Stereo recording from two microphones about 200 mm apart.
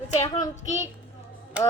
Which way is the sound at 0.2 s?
20° left (ahead or behind).